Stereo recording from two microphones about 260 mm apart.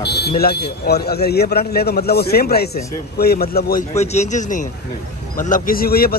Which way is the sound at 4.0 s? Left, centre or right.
Left.